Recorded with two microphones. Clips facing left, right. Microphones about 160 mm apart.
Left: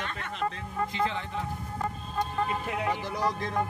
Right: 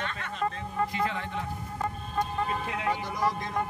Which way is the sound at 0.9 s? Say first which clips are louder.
Even; 25° left (ahead or behind).